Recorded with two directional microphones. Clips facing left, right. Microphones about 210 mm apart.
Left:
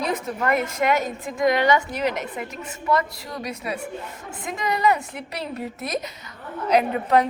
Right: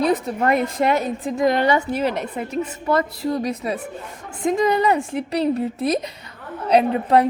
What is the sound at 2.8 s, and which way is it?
A woman's voice, 25° right (ahead or behind).